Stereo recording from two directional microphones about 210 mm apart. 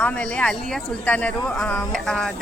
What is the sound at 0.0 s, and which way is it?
Speech, 5° left (ahead or behind).